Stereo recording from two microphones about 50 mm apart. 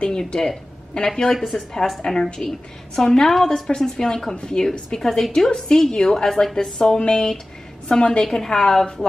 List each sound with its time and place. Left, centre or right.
0.0 s speech: centre
1.3 s a woman's voice: centre
8.3 s a woman's voice: centre